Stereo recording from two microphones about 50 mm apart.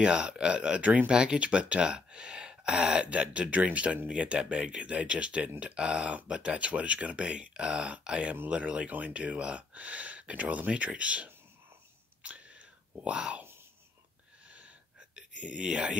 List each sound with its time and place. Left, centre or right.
0.0 s speech: centre
12.2 s whispering: right
14.5 s a sound: right